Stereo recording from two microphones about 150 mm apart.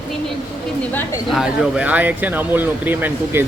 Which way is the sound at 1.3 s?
5° right (ahead or behind).